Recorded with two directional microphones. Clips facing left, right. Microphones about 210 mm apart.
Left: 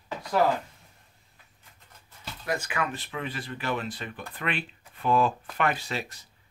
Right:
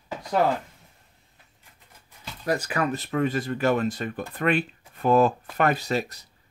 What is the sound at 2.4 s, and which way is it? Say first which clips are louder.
Speech: right 5 dB; 40° right (ahead or behind).